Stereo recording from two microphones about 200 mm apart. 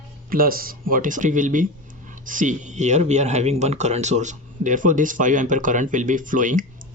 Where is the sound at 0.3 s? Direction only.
45° right (ahead or behind).